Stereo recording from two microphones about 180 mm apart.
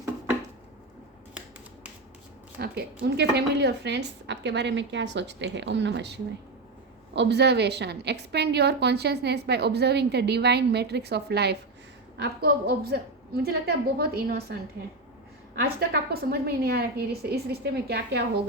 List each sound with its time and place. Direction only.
2.6 s a woman's voice: 65° right (ahead or behind)
7.2 s a woman's voice: 70° right (ahead or behind)
15.5 s a woman's voice: 60° right (ahead or behind)